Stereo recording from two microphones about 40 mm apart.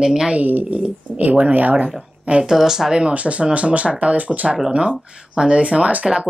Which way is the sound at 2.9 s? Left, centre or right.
Right.